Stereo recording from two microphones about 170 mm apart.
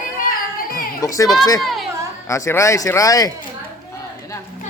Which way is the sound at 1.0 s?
20° left (ahead or behind).